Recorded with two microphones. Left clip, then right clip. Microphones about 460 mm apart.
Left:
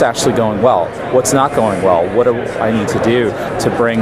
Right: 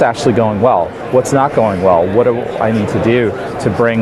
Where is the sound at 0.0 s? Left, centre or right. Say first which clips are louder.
Right 1 dB; right.